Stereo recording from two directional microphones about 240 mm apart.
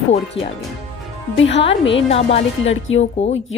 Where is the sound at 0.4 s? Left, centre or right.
Left.